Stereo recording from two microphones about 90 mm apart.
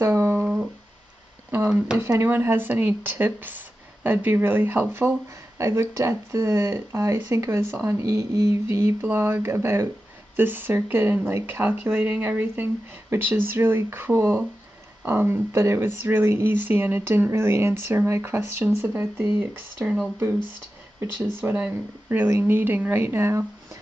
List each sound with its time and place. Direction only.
0.0 s a sound: 30° right (ahead or behind)
2.0 s speech: 30° right (ahead or behind)
21.5 s speech: 15° right (ahead or behind)